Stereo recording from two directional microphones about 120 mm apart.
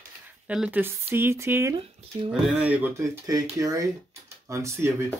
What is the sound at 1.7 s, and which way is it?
Speech, 45° right (ahead or behind).